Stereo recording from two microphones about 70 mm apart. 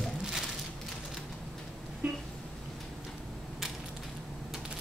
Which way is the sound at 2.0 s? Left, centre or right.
Centre.